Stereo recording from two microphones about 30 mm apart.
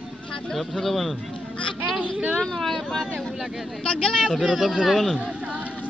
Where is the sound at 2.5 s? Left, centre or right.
Centre.